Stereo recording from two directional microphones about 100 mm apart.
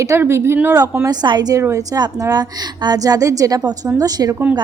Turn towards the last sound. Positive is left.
turn(degrees=-40)  # may be behind; listen again after turning